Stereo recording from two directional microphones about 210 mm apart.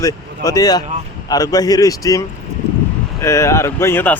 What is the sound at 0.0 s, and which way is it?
Speech, 15° left (ahead or behind).